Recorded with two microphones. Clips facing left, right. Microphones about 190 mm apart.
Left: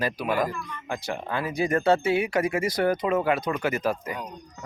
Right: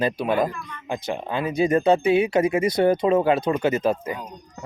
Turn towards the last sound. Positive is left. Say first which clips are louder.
# right 5 dB
turn(degrees=-25)  # may be behind; listen again after turning